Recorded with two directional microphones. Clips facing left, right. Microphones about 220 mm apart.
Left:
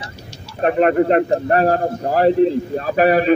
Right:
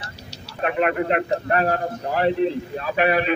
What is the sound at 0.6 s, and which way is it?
A man's voice, 40° left (ahead or behind).